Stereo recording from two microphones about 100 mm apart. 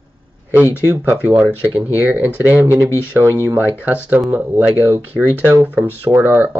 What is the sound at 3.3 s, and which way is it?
Speech, 30° right (ahead or behind).